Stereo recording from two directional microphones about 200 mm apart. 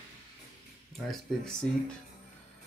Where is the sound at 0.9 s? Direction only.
Centre (ahead or behind).